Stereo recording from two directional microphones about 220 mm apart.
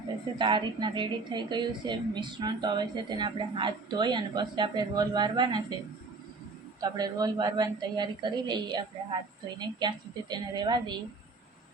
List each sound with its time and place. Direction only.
0.3 s a woman's voice: 20° right (ahead or behind)
6.8 s a woman's voice: 15° right (ahead or behind)